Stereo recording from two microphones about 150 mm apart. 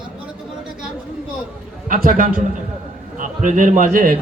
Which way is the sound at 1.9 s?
65° right (ahead or behind).